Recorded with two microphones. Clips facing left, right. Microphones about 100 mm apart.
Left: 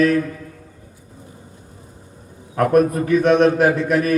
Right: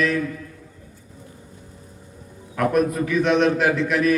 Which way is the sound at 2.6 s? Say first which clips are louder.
Left 4 dB; 45° left (ahead or behind).